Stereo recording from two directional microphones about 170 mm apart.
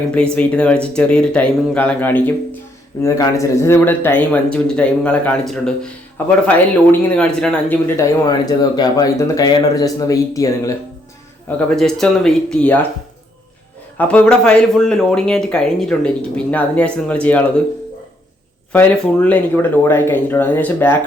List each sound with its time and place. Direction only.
0.1 s speech: 5° left (ahead or behind)
7.9 s speech: 20° left (ahead or behind)
11.4 s speech: 5° left (ahead or behind)
14.0 s speech: 10° left (ahead or behind)
18.7 s speech: 10° left (ahead or behind)